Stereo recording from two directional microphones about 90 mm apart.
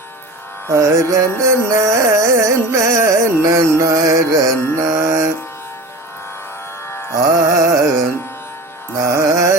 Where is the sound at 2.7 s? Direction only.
35° right (ahead or behind).